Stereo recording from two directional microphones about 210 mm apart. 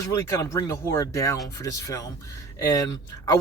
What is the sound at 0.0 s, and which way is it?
Speech, 15° left (ahead or behind).